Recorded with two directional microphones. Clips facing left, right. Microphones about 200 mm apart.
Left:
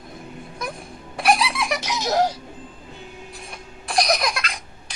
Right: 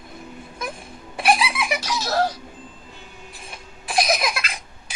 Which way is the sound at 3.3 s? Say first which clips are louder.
Left 2 dB; centre (ahead or behind).